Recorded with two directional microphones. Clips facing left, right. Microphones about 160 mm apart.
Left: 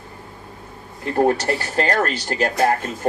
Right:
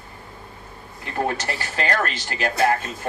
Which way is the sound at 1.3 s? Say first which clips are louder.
Left 7 dB; 40° left (ahead or behind).